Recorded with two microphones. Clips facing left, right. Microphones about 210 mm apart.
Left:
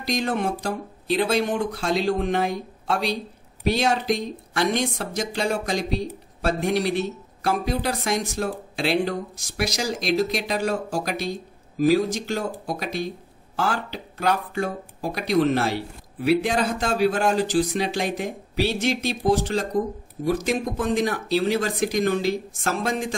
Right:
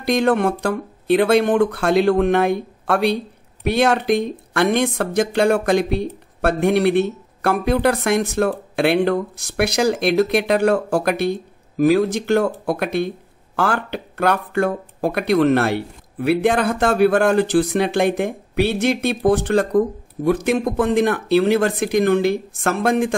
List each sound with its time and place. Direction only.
0.0 s speech: 60° right (ahead or behind)